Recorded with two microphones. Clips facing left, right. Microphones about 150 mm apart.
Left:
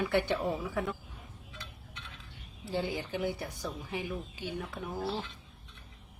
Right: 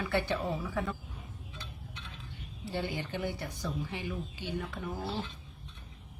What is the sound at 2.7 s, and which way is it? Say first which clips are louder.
A woman's voice: left 2 dB; 5° left (ahead or behind).